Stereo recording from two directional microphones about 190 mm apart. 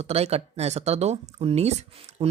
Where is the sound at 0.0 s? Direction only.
35° right (ahead or behind).